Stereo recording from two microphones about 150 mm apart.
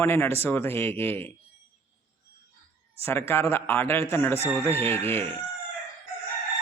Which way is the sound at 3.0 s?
15° left (ahead or behind).